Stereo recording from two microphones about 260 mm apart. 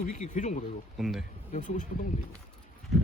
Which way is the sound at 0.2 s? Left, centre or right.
Left.